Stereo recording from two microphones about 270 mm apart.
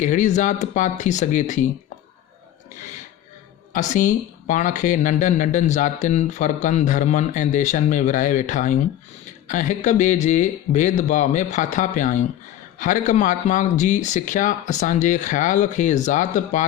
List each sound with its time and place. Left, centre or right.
0.0 s speech: left
3.7 s speech: left